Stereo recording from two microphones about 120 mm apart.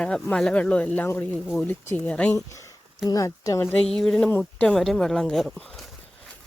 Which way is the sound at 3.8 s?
5° left (ahead or behind).